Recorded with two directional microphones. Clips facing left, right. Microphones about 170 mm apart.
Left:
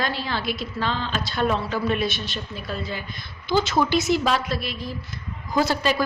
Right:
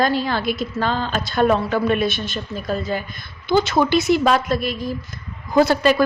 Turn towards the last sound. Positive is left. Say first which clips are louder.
# right 7 dB
turn(degrees=-55)  # may be behind; listen again after turning